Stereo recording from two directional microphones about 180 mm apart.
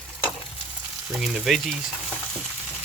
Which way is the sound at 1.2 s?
Centre (ahead or behind).